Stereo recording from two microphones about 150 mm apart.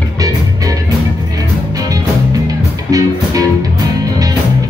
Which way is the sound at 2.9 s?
25° right (ahead or behind).